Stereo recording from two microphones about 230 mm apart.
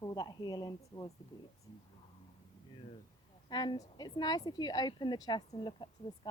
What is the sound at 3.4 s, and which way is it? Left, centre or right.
A woman's voice, centre.